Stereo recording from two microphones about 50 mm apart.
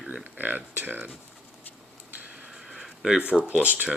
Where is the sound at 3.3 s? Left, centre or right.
Right.